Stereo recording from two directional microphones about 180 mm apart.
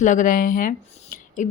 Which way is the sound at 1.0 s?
45° left (ahead or behind).